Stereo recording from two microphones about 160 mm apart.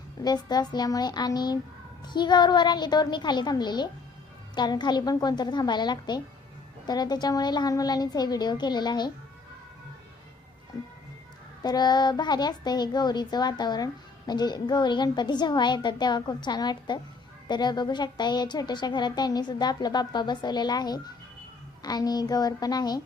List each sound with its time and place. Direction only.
0.2 s speech: 25° left (ahead or behind)
11.6 s speech: 25° left (ahead or behind)